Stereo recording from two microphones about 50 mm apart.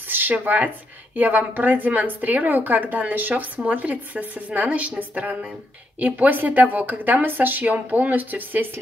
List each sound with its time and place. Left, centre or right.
0.1 s a woman's voice: right